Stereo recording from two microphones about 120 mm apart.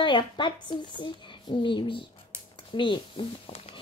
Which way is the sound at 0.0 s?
40° left (ahead or behind).